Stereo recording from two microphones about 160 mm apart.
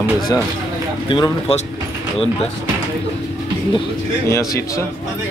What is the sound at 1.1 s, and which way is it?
Speech, 35° left (ahead or behind).